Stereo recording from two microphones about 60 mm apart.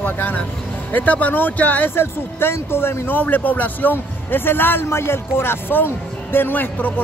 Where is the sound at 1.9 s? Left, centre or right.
Left.